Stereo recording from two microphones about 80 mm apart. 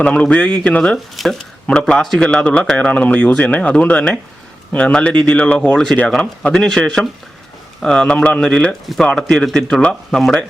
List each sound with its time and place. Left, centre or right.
0.0 s a man's voice: centre
1.1 s speech: centre
1.6 s a man's voice: centre